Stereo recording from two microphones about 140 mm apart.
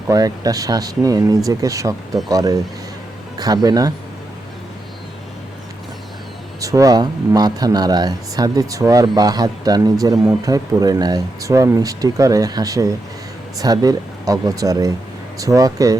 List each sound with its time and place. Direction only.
0.1 s speech: 25° right (ahead or behind)
6.6 s speech: 25° right (ahead or behind)